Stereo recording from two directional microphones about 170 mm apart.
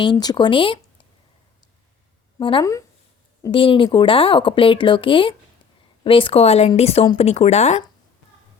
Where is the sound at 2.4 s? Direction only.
30° left (ahead or behind).